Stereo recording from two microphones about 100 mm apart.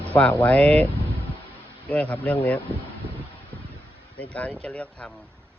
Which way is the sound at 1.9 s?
15° left (ahead or behind).